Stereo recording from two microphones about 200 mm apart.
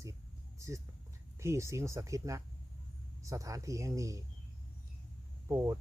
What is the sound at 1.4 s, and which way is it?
Speech, 15° right (ahead or behind).